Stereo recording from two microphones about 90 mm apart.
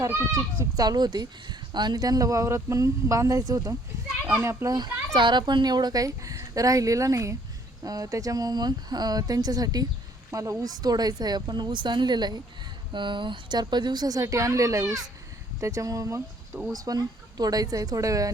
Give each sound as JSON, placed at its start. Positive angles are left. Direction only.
{"t": 0.0, "sound": "a child's voice", "side_deg": -35}
{"t": 4.3, "sound": "a child's voice", "side_deg": -30}
{"t": 4.7, "sound": "a child's voice", "side_deg": -60}